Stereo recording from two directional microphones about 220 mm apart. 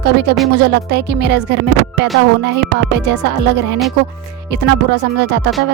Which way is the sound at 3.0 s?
50° right (ahead or behind).